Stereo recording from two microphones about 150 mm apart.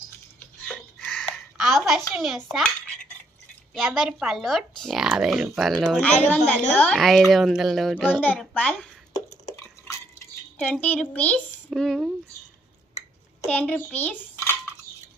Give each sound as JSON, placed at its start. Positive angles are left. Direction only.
{"t": 0.6, "sound": "chicken", "side_deg": 0}
{"t": 1.3, "sound": "a child's voice", "side_deg": 0}
{"t": 3.8, "sound": "speech", "side_deg": 0}
{"t": 9.1, "sound": "a sound", "side_deg": 25}
{"t": 10.6, "sound": "speech", "side_deg": 10}
{"t": 13.5, "sound": "speech", "side_deg": 10}